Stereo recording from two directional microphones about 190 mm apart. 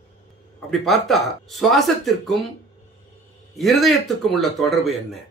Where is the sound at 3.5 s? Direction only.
Centre (ahead or behind).